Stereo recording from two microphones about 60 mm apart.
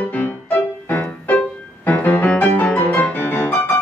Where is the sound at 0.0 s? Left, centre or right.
Left.